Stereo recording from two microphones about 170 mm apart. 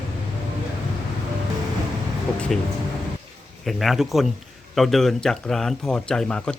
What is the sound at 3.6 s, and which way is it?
Speech, centre (ahead or behind).